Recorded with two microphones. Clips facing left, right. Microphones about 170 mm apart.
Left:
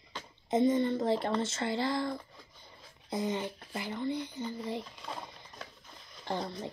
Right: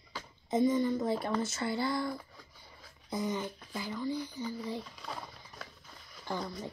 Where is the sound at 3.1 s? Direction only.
55° left (ahead or behind).